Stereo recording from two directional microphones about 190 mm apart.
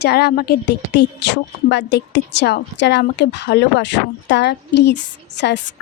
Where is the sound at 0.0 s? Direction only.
60° left (ahead or behind).